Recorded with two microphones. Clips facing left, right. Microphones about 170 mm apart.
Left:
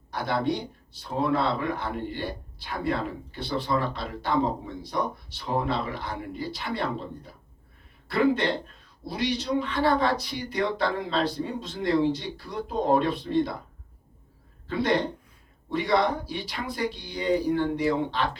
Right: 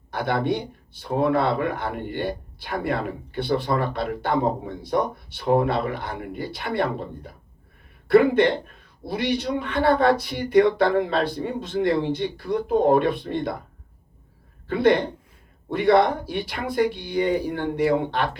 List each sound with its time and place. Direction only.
0.1 s a man's voice: 55° right (ahead or behind)
14.7 s a man's voice: 55° right (ahead or behind)